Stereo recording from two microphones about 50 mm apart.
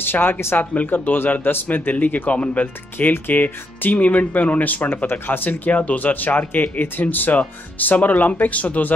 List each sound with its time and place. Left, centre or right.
0.0 s speech: left
5.2 s speech: left
5.5 s speech: left